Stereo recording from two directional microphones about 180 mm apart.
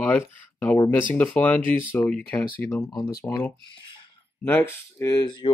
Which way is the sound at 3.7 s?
25° left (ahead or behind).